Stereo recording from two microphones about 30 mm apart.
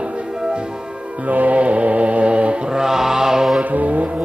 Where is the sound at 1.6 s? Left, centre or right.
Right.